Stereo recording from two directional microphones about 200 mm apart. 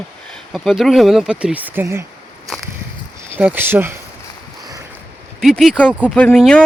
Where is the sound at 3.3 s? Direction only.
10° right (ahead or behind).